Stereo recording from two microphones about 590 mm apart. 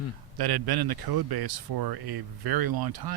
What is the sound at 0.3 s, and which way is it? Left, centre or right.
Speech, right.